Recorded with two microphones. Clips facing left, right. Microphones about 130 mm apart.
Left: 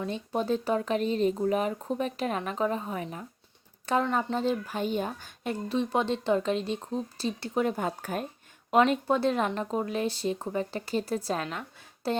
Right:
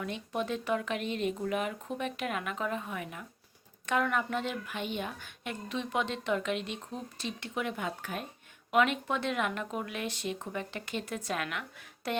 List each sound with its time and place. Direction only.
0.0 s speech: 35° left (ahead or behind)